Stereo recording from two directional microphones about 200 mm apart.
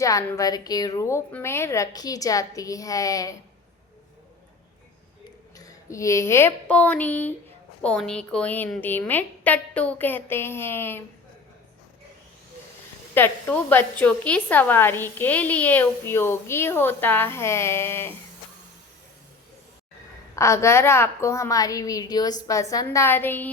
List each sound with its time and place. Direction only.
0.0 s a woman's voice: 15° left (ahead or behind)
5.5 s a woman's voice: 15° left (ahead or behind)
13.1 s a woman's voice: 10° left (ahead or behind)
20.3 s a woman's voice: 15° left (ahead or behind)